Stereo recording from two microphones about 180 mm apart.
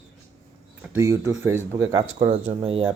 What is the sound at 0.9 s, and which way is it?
Speech, 15° right (ahead or behind).